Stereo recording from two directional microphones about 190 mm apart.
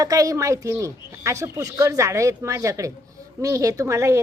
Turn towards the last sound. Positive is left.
turn(degrees=-15)  # may be behind; listen again after turning